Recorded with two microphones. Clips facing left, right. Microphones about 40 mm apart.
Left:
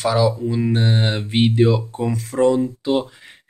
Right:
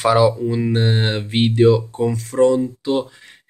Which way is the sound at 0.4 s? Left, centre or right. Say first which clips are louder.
Right 1 dB; centre.